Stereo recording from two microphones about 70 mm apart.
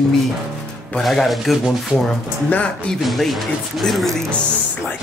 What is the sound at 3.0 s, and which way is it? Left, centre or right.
Speech, centre.